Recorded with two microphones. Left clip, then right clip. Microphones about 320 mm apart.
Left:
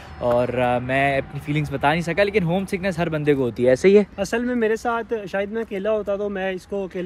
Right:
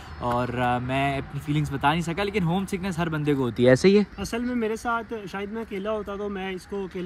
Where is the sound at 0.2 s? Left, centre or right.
Centre.